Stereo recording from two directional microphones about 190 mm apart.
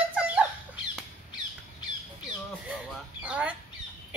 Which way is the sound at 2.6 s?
5° right (ahead or behind).